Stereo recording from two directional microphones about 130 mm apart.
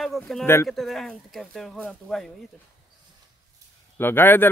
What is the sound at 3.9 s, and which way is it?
Speech, 15° left (ahead or behind).